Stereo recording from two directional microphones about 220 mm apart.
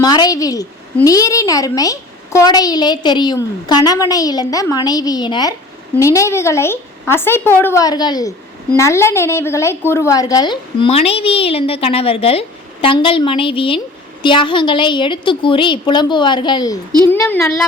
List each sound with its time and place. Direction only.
0.0 s a woman's voice: 15° left (ahead or behind)
17.1 s a woman's voice: 10° left (ahead or behind)